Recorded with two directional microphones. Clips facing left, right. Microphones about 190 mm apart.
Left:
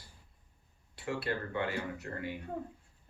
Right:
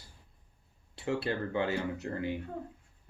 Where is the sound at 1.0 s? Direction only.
25° right (ahead or behind).